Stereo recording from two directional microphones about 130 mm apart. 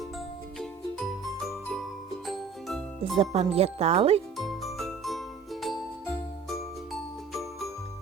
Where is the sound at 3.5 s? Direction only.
50° right (ahead or behind).